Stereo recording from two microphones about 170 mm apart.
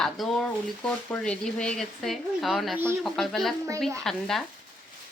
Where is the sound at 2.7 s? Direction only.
15° right (ahead or behind).